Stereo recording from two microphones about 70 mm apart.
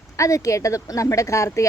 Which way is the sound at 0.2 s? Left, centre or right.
Left.